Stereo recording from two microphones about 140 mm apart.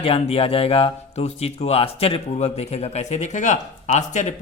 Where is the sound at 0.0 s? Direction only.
45° left (ahead or behind).